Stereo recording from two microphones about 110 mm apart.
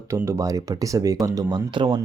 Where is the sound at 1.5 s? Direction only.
45° right (ahead or behind).